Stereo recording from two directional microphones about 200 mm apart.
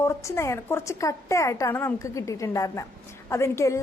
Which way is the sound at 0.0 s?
15° left (ahead or behind).